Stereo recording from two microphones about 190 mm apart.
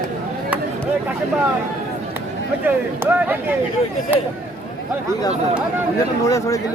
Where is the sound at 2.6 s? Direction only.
10° right (ahead or behind).